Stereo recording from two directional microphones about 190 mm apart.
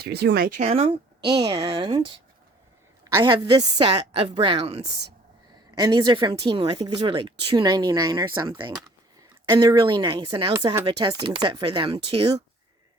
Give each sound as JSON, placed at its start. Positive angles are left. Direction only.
{"t": 0.0, "sound": "speech", "side_deg": -60}
{"t": 3.0, "sound": "a sound", "side_deg": -15}
{"t": 3.2, "sound": "speech", "side_deg": -25}
{"t": 5.7, "sound": "speech", "side_deg": -20}